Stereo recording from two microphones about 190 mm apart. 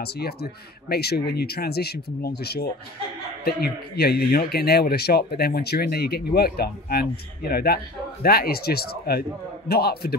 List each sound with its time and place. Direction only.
0.0 s speech: 55° left (ahead or behind)